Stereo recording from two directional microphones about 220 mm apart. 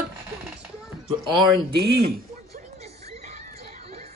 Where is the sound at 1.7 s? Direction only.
45° right (ahead or behind).